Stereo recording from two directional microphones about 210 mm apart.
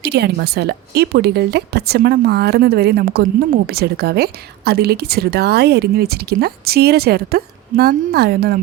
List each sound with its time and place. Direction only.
0.1 s speech: 50° right (ahead or behind)